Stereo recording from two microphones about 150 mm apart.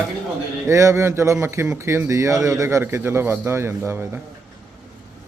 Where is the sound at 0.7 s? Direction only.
20° right (ahead or behind).